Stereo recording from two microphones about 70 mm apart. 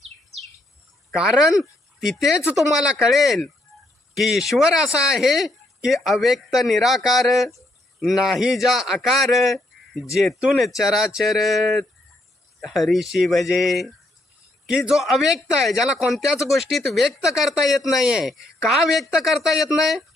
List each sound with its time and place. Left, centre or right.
1.1 s speech: centre
3.1 s speech: centre
4.6 s speech: centre